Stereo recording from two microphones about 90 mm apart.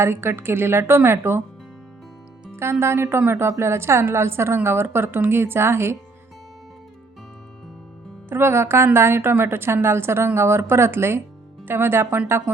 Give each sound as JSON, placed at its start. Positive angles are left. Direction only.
{"t": 0.0, "sound": "a woman's voice", "side_deg": -30}
{"t": 2.6, "sound": "a woman's voice", "side_deg": -30}
{"t": 8.3, "sound": "a woman's voice", "side_deg": -25}